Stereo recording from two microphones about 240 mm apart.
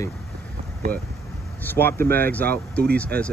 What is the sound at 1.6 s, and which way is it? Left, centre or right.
Speech, centre.